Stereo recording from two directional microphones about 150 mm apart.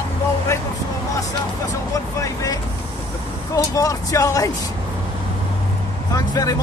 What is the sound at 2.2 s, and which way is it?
Speech, 25° left (ahead or behind).